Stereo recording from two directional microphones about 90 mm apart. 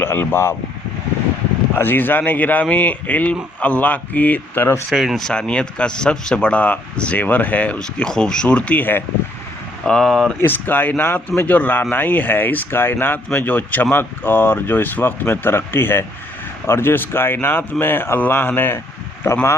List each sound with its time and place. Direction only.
0.0 s a man's voice: 25° left (ahead or behind)
1.7 s a man's voice: 20° left (ahead or behind)
4.9 s speech: centre (ahead or behind)
5.3 s speech: 10° left (ahead or behind)
9.8 s speech: 5° left (ahead or behind)
10.4 s a man's voice: 20° left (ahead or behind)